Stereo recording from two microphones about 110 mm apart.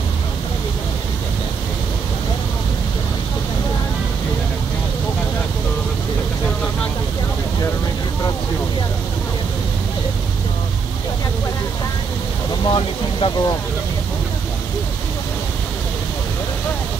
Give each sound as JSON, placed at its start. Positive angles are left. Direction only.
{"t": 12.6, "sound": "vehicle", "side_deg": 45}